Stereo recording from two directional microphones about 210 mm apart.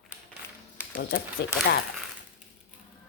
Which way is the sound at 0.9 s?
45° left (ahead or behind).